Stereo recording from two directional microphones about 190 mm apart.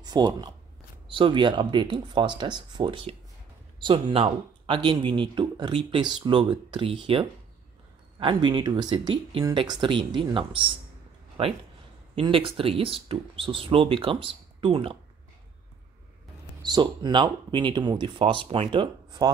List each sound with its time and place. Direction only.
0.0 s speech: 20° right (ahead or behind)
16.6 s speech: 20° right (ahead or behind)